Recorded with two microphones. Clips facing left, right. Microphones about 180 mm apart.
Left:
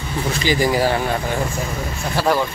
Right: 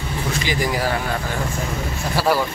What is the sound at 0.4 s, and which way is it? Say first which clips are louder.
Speech: left 6 dB; 30° left (ahead or behind).